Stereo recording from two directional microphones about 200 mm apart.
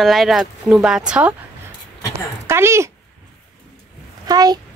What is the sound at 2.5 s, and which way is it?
Speech, 15° right (ahead or behind).